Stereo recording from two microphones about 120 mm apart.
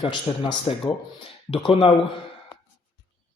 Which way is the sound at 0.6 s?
50° left (ahead or behind).